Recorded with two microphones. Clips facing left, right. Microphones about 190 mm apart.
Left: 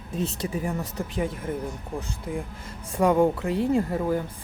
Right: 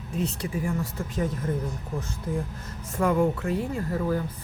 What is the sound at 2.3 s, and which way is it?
Speech, 15° left (ahead or behind).